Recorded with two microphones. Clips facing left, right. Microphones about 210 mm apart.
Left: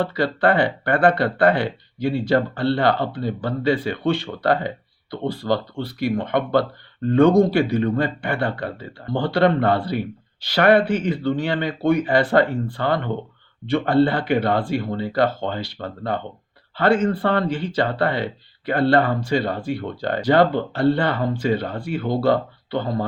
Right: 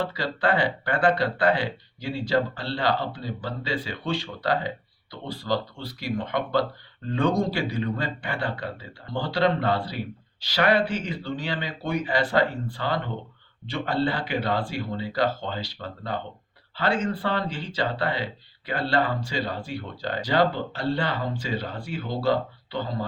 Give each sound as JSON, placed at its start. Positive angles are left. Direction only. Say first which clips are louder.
{"t": 0.0, "sound": "speech", "louder": "left 7 dB", "side_deg": 55}